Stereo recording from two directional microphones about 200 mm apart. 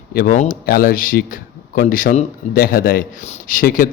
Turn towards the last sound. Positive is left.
turn(degrees=45)  # may be behind; listen again after turning